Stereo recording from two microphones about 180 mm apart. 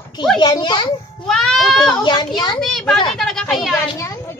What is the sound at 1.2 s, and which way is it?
A woman's voice, 5° left (ahead or behind).